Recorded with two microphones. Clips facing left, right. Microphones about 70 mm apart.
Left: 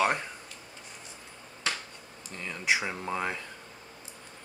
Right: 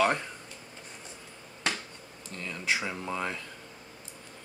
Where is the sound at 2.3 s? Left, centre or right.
Left.